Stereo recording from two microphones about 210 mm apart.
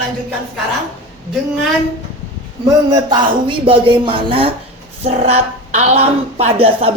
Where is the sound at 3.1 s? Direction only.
25° right (ahead or behind).